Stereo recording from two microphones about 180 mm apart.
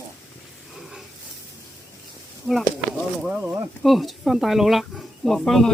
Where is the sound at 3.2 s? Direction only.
5° right (ahead or behind).